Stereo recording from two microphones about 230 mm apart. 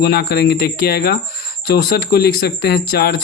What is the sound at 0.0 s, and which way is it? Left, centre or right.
Speech, left.